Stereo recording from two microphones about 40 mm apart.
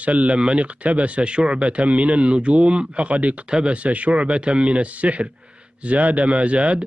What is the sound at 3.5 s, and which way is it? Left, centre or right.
Speech, right.